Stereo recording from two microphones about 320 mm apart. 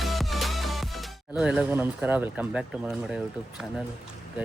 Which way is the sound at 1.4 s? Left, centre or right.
Centre.